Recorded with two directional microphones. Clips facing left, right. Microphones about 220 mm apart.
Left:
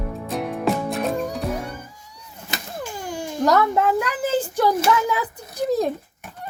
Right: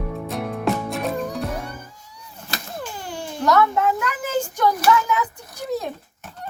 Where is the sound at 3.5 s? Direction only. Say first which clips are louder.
Even; 35° left (ahead or behind).